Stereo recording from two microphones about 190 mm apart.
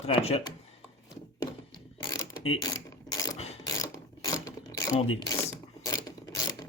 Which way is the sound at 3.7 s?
15° left (ahead or behind).